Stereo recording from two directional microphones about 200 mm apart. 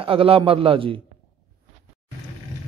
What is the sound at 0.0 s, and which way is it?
Speech, 25° right (ahead or behind).